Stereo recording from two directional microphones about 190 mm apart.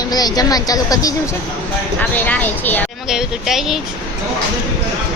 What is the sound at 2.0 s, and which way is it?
Speech, 10° left (ahead or behind).